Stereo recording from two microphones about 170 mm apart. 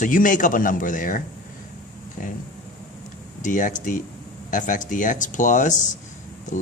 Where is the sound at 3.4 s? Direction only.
50° left (ahead or behind).